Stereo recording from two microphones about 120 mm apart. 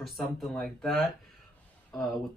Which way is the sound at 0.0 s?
Centre (ahead or behind).